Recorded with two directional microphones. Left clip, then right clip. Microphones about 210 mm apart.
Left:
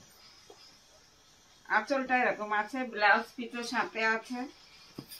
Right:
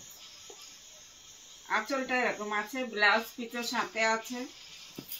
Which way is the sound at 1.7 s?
Centre (ahead or behind).